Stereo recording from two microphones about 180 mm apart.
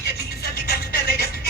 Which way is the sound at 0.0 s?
60° left (ahead or behind).